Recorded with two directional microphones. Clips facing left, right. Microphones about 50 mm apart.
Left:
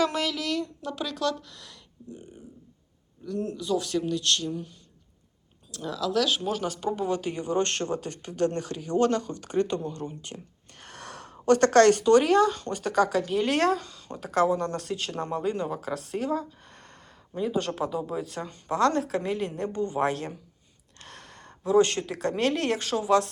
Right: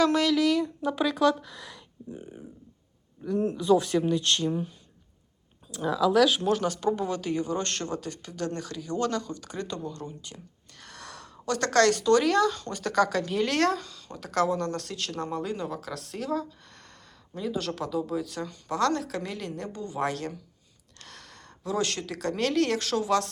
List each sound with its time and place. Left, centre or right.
0.0 s a woman's voice: centre; by 4.7 s right
5.7 s a woman's voice: centre
6.4 s speech: centre